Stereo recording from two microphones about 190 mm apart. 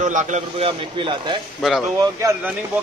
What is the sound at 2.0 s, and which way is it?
Speech, 15° right (ahead or behind).